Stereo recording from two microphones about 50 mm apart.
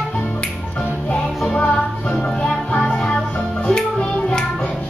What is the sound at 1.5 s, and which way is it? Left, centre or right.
Music, left.